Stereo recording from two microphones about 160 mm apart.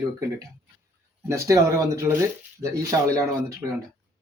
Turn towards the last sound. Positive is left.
turn(degrees=-20)  # may be behind; listen again after turning